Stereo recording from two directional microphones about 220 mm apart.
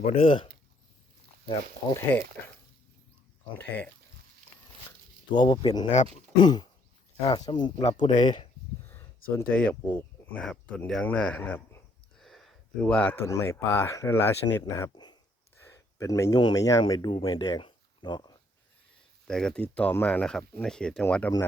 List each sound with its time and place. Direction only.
0.0 s speech: 25° left (ahead or behind)
1.5 s speech: 15° left (ahead or behind)
3.5 s speech: 10° left (ahead or behind)
5.3 s speech: 20° left (ahead or behind)
8.9 s a sound: 10° left (ahead or behind)
9.8 s speech: 10° left (ahead or behind)
19.3 s speech: 5° left (ahead or behind)